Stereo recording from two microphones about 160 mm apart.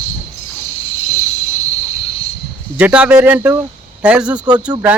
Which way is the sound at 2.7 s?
5° right (ahead or behind).